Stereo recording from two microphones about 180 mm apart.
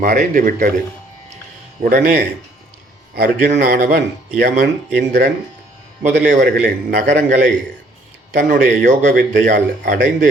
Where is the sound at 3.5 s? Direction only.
55° right (ahead or behind).